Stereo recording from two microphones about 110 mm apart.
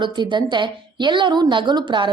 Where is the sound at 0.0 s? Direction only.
45° right (ahead or behind).